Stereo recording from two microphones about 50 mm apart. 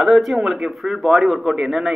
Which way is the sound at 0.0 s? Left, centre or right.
Centre.